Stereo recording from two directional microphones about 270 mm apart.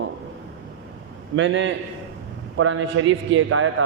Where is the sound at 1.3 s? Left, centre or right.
Right.